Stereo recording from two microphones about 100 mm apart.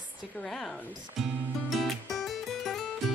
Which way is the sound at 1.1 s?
Centre (ahead or behind).